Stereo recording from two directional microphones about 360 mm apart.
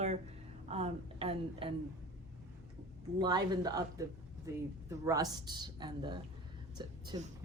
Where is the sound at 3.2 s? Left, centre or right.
Centre.